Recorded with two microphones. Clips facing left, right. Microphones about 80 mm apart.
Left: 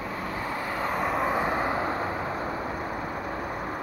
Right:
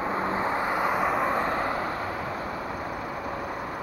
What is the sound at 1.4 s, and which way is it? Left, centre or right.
Vehicle, centre.